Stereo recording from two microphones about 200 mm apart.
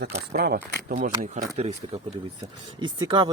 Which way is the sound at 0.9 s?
35° right (ahead or behind).